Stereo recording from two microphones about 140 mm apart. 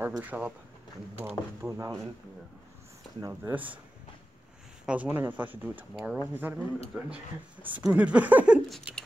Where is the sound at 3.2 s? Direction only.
25° right (ahead or behind).